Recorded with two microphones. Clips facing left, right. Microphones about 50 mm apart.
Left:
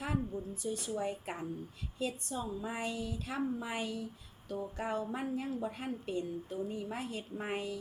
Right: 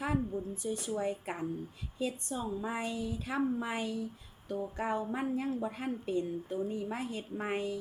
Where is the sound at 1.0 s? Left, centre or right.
Centre.